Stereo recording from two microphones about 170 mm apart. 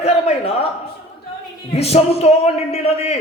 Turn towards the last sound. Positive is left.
turn(degrees=35)  # may be behind; listen again after turning